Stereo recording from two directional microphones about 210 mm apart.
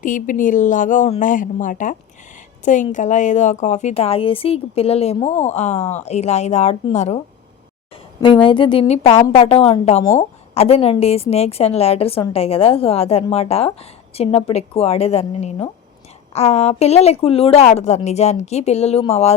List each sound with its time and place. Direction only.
0.0 s a woman's voice: 40° left (ahead or behind)
8.2 s a woman's voice: 25° left (ahead or behind)